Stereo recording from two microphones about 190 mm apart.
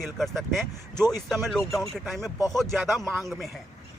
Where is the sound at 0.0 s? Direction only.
Centre (ahead or behind).